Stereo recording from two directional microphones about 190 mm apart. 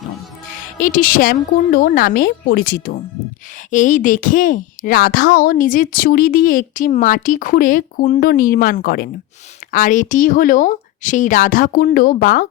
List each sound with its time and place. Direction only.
0.4 s a woman's voice: 45° left (ahead or behind)